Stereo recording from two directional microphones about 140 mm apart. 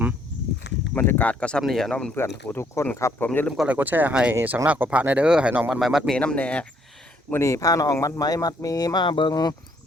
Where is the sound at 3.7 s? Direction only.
10° right (ahead or behind).